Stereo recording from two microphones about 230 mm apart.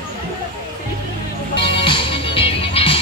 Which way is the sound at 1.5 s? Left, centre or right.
Left.